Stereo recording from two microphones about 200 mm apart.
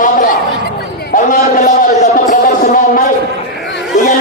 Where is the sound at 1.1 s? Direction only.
40° left (ahead or behind).